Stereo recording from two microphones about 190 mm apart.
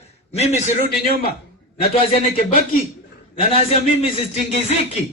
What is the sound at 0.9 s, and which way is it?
Speech, 55° left (ahead or behind).